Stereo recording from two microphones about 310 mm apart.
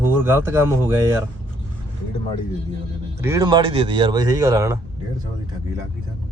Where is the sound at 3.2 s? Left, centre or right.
Centre.